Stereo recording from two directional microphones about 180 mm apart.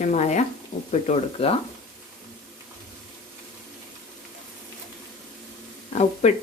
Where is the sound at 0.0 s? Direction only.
40° left (ahead or behind).